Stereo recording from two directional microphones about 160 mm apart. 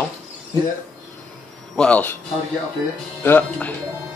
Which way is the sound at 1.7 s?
5° left (ahead or behind).